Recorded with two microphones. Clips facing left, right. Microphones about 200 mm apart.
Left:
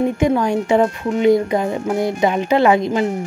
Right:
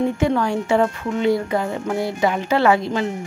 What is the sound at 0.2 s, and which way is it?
Speech, 15° left (ahead or behind).